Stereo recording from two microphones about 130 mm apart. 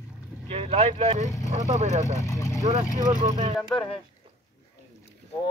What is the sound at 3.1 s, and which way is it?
Speech, 75° right (ahead or behind).